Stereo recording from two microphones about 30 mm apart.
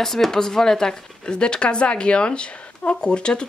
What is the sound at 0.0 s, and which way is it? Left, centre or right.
Speech, centre.